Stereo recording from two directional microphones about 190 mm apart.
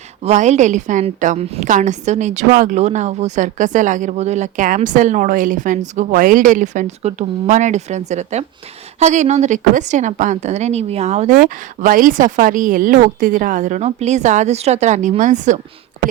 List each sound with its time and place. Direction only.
0.2 s a woman's voice: 35° right (ahead or behind)